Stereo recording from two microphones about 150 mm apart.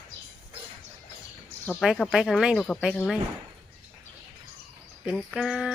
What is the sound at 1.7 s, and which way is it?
Speech, centre (ahead or behind).